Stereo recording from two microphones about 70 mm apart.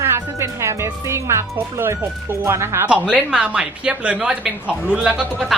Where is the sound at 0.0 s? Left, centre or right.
Right.